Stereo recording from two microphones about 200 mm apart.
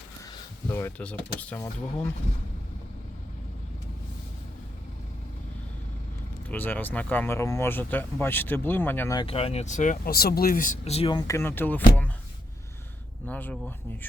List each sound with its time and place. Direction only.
0.7 s speech: 10° left (ahead or behind)
6.5 s speech: 10° left (ahead or behind)
9.1 s speech: 30° left (ahead or behind); by 11.8 s 10° left (ahead or behind)
13.2 s speech: 5° left (ahead or behind)